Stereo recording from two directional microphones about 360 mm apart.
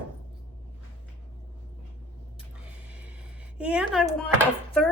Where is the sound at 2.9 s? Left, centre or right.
Centre.